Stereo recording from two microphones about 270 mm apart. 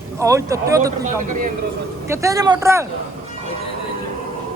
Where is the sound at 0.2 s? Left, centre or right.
Centre.